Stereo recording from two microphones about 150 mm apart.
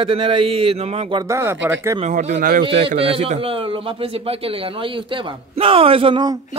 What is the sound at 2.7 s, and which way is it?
Speech, 40° right (ahead or behind).